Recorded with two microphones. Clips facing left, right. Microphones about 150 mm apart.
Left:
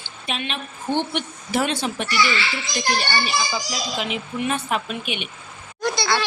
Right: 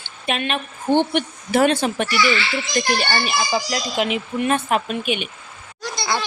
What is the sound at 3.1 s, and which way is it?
Speech, 60° right (ahead or behind).